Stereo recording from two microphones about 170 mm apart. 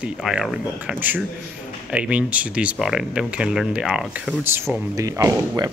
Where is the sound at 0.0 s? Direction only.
5° right (ahead or behind).